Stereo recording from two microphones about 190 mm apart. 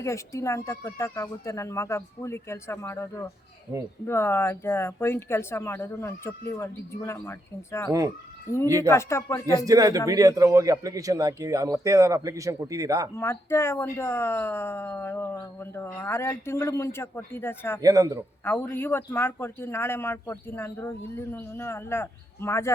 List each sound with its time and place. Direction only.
0.0 s speech: 15° left (ahead or behind)
9.6 s a man's voice: 20° right (ahead or behind)
13.1 s speech: 15° left (ahead or behind)
17.8 s a man's voice: 20° right (ahead or behind)
18.4 s speech: 10° left (ahead or behind)